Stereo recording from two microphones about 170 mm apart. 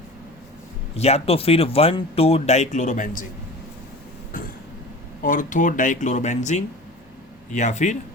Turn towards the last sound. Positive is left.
turn(degrees=45)  # may be behind; listen again after turning